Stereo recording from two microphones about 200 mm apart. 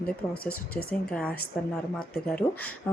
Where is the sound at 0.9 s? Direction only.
5° left (ahead or behind).